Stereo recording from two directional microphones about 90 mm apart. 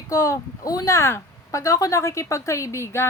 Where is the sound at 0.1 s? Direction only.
40° left (ahead or behind).